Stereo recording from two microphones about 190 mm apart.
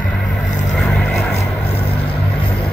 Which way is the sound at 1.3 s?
30° left (ahead or behind).